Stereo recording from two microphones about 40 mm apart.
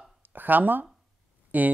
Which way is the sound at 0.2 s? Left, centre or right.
Right.